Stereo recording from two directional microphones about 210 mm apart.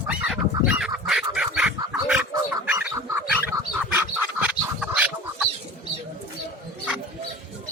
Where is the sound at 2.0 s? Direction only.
10° right (ahead or behind).